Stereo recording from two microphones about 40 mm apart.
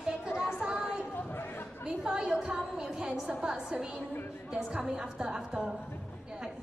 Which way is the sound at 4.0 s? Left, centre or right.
Left.